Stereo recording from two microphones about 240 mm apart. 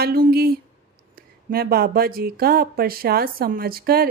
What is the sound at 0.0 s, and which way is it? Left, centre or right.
Speech, right.